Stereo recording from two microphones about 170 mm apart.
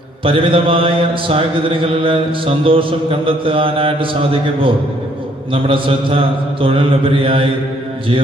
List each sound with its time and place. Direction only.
0.2 s mantra: 30° right (ahead or behind)